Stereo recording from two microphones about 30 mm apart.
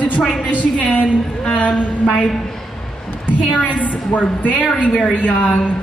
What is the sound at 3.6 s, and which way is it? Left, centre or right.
A woman's voice, left.